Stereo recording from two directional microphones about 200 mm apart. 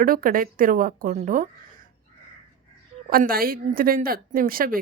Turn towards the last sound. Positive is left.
turn(degrees=-45)  # may be behind; listen again after turning